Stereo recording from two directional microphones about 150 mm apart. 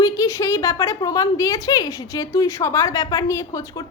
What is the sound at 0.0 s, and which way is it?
A woman's voice, 20° left (ahead or behind).